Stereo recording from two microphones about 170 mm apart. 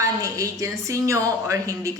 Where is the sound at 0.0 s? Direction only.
20° right (ahead or behind).